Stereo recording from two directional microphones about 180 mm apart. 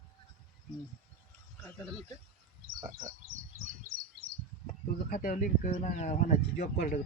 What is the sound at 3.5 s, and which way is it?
Bird, 50° right (ahead or behind).